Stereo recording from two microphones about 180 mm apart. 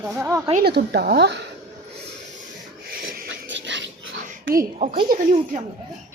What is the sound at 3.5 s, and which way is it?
Dog, 90° right.